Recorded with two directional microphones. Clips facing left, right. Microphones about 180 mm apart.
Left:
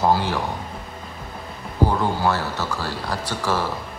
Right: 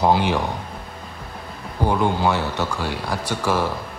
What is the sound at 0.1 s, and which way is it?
Speech, 20° right (ahead or behind).